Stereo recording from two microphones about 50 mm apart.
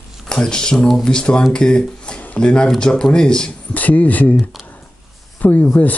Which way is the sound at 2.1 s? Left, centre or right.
Left.